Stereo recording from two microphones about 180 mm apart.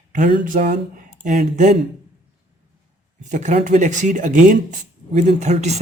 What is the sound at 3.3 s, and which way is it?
Speech, 40° right (ahead or behind).